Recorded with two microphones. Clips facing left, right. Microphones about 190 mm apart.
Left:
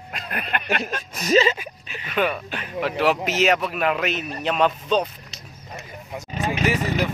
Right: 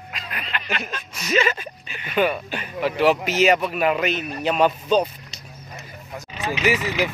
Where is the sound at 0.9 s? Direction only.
40° left (ahead or behind).